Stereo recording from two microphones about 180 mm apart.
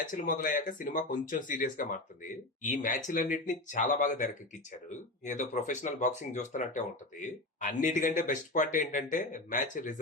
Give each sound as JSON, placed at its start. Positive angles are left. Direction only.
{"t": 0.1, "sound": "speech", "side_deg": 45}